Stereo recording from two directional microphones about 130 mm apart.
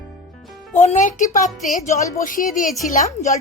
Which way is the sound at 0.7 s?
60° left (ahead or behind).